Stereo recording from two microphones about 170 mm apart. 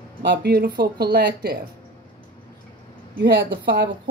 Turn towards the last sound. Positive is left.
turn(degrees=-65)  # may be behind; listen again after turning